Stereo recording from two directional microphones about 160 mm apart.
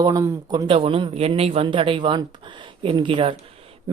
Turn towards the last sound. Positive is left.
turn(degrees=-35)  # may be behind; listen again after turning